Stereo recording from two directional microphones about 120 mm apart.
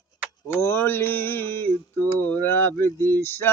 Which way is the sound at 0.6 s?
20° left (ahead or behind).